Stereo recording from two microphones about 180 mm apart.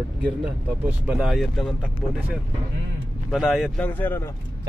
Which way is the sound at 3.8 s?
10° left (ahead or behind).